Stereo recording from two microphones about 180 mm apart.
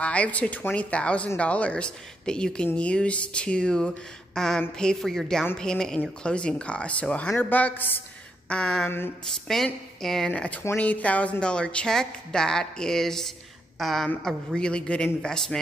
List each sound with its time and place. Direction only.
0.0 s speech: 5° left (ahead or behind)